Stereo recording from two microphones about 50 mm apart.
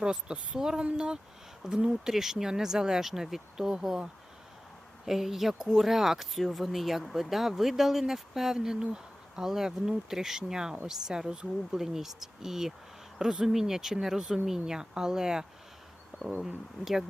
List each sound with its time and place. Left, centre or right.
0.0 s speech: centre